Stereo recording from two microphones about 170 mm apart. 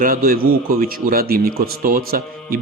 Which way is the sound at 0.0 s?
55° right (ahead or behind).